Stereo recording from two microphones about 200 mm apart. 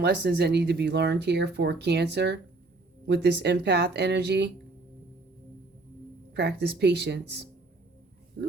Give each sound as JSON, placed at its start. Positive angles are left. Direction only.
{"t": 0.0, "sound": "speech", "side_deg": -55}
{"t": 6.3, "sound": "speech", "side_deg": -55}